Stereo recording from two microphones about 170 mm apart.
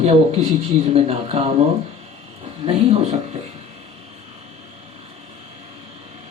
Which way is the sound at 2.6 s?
35° right (ahead or behind).